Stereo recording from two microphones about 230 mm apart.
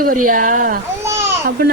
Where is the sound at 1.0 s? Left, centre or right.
Centre.